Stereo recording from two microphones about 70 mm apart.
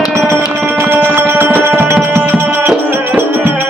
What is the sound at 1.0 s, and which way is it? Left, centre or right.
Music, right.